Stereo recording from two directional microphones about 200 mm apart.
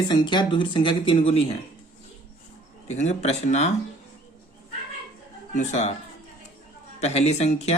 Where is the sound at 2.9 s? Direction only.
35° left (ahead or behind).